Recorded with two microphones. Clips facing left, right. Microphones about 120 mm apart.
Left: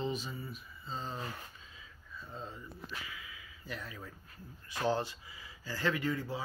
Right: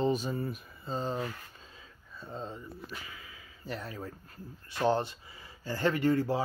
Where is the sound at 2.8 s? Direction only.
35° right (ahead or behind).